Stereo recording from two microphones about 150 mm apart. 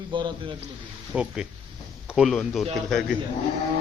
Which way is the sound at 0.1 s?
30° right (ahead or behind).